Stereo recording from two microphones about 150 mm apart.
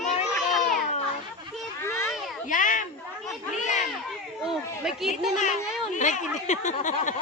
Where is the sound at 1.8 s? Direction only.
15° left (ahead or behind).